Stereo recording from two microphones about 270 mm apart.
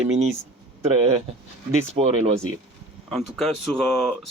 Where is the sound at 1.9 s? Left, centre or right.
Right.